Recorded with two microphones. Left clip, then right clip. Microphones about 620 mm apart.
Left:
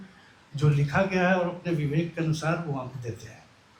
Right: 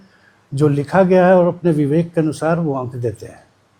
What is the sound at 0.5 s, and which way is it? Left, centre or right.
A man's voice, right.